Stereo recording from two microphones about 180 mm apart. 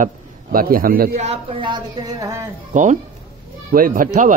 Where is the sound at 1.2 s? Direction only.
30° right (ahead or behind).